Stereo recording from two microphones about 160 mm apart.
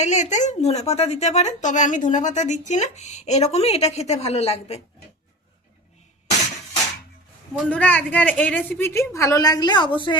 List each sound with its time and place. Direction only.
0.0 s a woman's voice: 50° left (ahead or behind)
7.6 s a woman's voice: 10° left (ahead or behind); by 10.2 s 30° left (ahead or behind)